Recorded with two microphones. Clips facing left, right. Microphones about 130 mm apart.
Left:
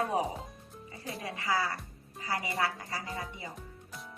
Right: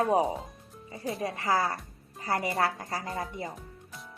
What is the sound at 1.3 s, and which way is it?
A woman's voice, 50° right (ahead or behind).